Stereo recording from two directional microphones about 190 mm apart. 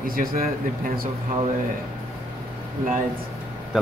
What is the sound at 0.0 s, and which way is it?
Speech, 50° right (ahead or behind).